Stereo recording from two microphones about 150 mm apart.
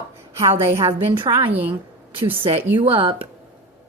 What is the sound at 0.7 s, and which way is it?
Speech, 20° right (ahead or behind).